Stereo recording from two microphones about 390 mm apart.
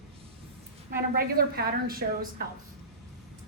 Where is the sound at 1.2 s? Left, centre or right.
Right.